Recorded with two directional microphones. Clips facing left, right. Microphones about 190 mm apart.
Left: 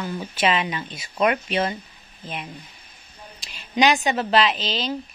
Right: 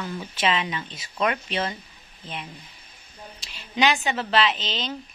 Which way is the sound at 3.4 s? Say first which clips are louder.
Left 3 dB; 15° left (ahead or behind).